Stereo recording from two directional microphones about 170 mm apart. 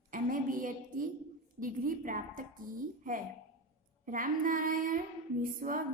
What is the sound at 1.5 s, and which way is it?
Female singing, 55° right (ahead or behind).